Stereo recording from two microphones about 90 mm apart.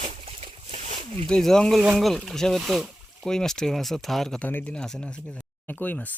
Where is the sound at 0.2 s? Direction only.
90° right.